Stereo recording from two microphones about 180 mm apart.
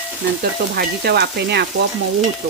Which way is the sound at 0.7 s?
60° right (ahead or behind).